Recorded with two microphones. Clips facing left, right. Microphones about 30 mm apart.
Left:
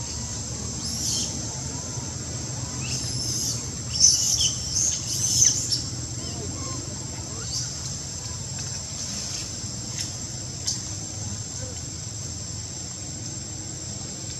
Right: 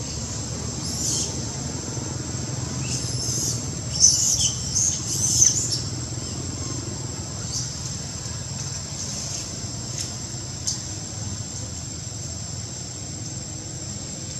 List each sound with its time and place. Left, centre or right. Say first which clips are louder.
0.9 s owl: right 1 dB; centre
2.8 s bird: left 1 dB; centre
4.8 s a sound: right 1 dB; centre